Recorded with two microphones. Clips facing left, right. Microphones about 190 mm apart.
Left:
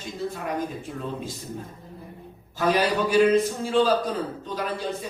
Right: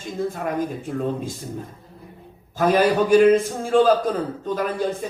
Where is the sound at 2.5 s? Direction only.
50° right (ahead or behind).